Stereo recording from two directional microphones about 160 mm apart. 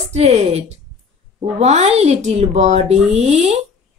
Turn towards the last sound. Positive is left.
turn(degrees=-40)  # may be behind; listen again after turning